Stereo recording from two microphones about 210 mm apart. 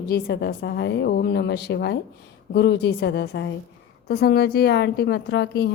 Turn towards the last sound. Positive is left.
turn(degrees=50)  # may be behind; listen again after turning